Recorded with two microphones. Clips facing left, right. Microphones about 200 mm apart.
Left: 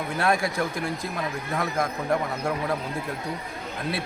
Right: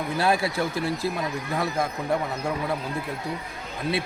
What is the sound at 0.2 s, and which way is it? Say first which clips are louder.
A man's voice: even; 5° right (ahead or behind).